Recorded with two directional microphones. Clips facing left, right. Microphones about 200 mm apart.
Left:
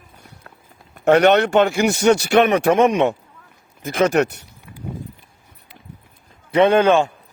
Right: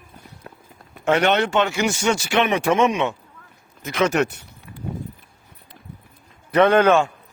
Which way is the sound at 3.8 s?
50° left (ahead or behind).